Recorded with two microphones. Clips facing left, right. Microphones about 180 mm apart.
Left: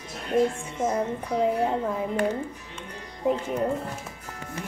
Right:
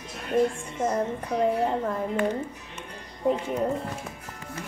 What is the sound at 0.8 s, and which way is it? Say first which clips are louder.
A woman's voice: even; 5° left (ahead or behind).